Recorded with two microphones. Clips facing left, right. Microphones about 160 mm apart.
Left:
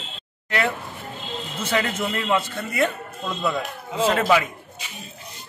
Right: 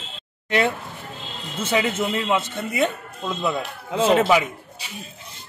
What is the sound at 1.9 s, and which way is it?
Speech, 20° right (ahead or behind).